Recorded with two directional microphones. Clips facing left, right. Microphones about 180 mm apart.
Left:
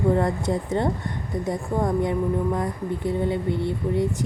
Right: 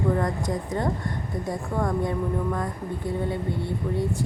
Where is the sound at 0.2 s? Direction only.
30° left (ahead or behind).